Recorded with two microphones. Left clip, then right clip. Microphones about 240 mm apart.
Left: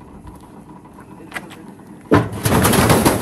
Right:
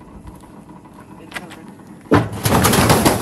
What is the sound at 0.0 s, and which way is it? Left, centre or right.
Vehicle, centre.